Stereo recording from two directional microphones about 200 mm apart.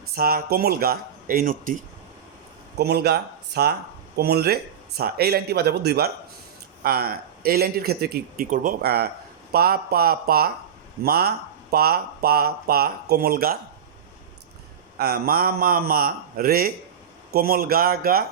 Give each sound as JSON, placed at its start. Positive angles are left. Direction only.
{"t": 0.0, "sound": "speech", "side_deg": -50}
{"t": 2.7, "sound": "speech", "side_deg": -55}
{"t": 14.9, "sound": "speech", "side_deg": -50}